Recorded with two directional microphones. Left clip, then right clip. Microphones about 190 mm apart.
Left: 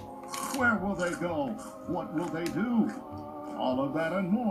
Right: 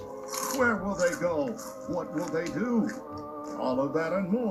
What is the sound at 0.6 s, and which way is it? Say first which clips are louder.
A woman's voice: right 2 dB; 25° right (ahead or behind).